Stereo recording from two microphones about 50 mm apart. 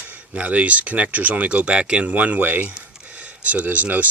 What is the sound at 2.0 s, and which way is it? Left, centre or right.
Speech, right.